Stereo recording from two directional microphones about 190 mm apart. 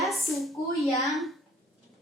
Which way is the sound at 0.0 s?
Centre (ahead or behind).